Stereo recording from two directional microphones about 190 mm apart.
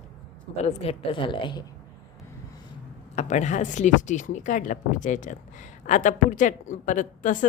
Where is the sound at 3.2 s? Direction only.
40° left (ahead or behind).